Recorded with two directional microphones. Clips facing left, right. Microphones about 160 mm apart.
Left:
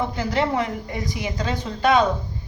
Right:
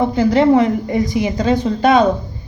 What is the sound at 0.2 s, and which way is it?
A woman's voice, 25° right (ahead or behind).